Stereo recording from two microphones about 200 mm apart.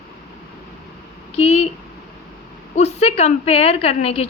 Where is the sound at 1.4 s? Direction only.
30° left (ahead or behind).